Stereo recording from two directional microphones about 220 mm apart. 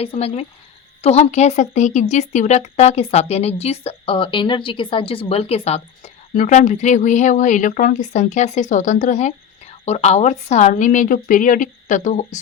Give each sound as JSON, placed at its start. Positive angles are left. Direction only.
{"t": 0.0, "sound": "a woman's voice", "side_deg": 25}